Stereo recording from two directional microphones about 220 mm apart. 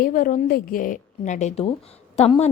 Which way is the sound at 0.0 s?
35° left (ahead or behind).